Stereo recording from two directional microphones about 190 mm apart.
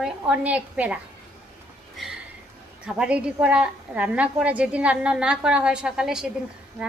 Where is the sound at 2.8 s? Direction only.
5° right (ahead or behind).